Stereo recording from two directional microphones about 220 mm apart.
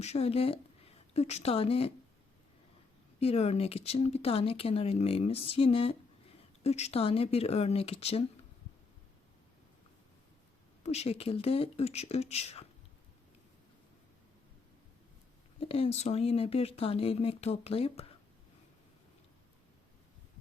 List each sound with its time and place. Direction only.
0.0 s speech: 30° left (ahead or behind)
3.2 s speech: 30° left (ahead or behind)
10.8 s speech: 30° left (ahead or behind)
15.6 s speech: 25° left (ahead or behind)